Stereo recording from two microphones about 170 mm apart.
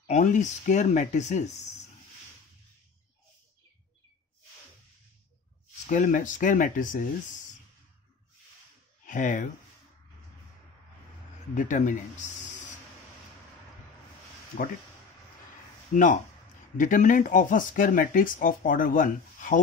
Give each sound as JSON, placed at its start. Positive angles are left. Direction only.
{"t": 0.0, "sound": "speech", "side_deg": 45}
{"t": 5.9, "sound": "speech", "side_deg": 50}
{"t": 9.0, "sound": "speech", "side_deg": 50}
{"t": 11.5, "sound": "speech", "side_deg": 50}
{"t": 15.9, "sound": "speech", "side_deg": 50}